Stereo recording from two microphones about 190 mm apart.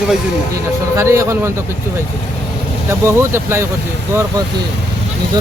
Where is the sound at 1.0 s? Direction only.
15° right (ahead or behind).